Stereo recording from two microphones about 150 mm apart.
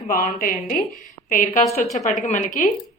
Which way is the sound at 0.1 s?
70° left (ahead or behind).